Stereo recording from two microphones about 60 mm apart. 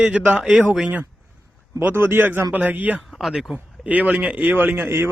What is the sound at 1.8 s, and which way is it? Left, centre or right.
A man's voice, right.